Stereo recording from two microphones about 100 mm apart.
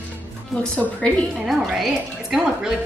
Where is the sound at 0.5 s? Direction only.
15° left (ahead or behind).